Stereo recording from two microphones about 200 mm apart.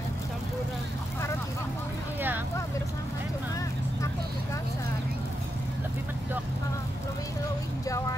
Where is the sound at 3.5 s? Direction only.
15° left (ahead or behind).